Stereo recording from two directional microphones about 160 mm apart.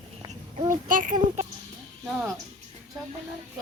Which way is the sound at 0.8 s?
55° right (ahead or behind).